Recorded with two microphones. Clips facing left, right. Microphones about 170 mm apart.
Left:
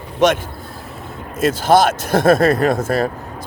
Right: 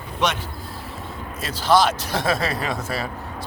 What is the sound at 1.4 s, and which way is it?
Speech, 50° left (ahead or behind).